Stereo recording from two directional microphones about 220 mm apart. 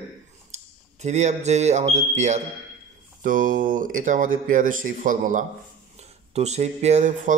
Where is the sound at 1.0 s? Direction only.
30° right (ahead or behind).